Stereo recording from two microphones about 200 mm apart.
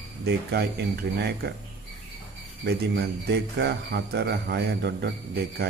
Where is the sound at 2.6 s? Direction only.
55° right (ahead or behind).